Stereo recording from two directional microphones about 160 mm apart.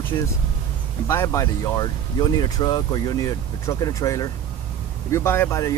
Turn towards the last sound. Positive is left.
turn(degrees=15)  # may be behind; listen again after turning